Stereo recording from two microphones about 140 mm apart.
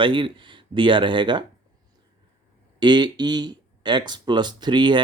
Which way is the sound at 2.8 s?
30° right (ahead or behind).